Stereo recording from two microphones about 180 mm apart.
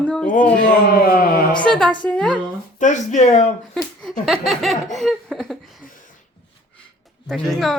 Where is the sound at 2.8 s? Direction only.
40° left (ahead or behind).